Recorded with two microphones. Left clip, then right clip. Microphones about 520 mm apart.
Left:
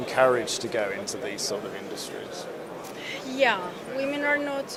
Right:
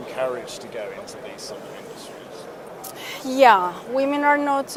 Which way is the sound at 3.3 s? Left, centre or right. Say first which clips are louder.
Right 10 dB; right.